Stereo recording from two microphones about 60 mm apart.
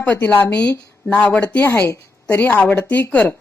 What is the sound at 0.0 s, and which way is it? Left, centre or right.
Speech, left.